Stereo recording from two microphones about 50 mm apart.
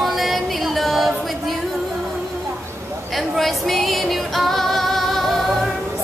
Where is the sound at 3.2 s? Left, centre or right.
Centre.